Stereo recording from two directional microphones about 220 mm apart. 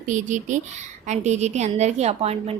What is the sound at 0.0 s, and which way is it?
A woman's voice, 35° right (ahead or behind).